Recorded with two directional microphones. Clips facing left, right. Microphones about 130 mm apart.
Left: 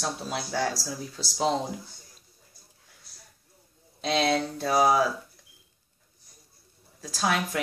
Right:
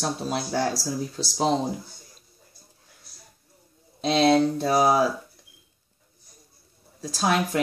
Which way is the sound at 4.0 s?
30° right (ahead or behind).